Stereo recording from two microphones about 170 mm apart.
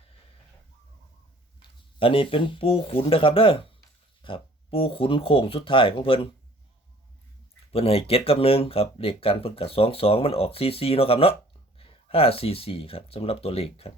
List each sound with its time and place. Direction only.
1.5 s speech: 30° left (ahead or behind)
7.7 s speech: 35° left (ahead or behind)